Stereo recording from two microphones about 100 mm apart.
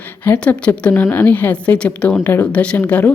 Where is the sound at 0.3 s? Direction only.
10° left (ahead or behind).